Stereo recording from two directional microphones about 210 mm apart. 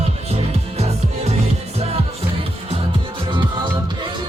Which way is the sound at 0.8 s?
30° right (ahead or behind).